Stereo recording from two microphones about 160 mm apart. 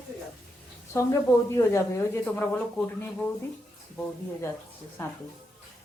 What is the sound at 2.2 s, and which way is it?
Speech, 10° left (ahead or behind).